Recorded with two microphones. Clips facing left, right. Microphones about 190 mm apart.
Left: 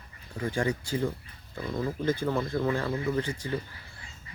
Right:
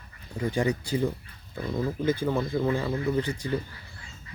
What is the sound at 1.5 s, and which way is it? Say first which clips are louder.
Speech: right 2 dB; 10° right (ahead or behind).